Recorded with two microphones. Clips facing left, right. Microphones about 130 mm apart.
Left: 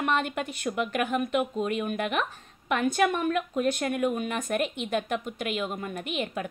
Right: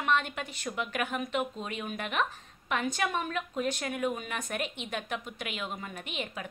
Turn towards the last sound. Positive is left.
turn(degrees=45)  # may be behind; listen again after turning